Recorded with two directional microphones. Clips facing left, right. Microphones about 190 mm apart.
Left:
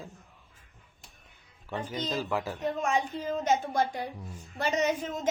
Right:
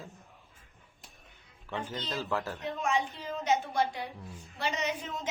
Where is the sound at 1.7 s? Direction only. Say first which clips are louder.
Left 3 dB; 15° left (ahead or behind).